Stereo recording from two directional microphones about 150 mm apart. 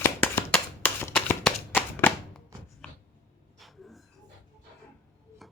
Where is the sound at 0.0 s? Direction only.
15° left (ahead or behind).